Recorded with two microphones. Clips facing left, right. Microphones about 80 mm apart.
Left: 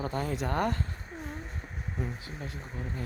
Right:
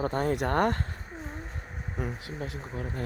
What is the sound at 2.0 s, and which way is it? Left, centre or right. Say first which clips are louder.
Speech: right 4 dB; right.